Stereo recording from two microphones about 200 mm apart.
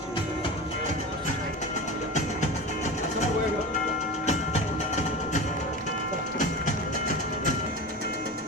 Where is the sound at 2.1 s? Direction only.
35° left (ahead or behind).